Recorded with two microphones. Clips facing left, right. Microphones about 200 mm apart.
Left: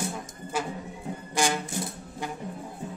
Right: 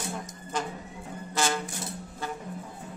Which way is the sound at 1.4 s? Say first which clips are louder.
Left 2 dB; 15° left (ahead or behind).